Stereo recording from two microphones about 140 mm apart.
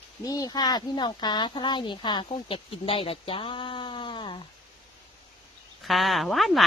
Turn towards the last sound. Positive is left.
turn(degrees=0)  # may be behind; listen again after turning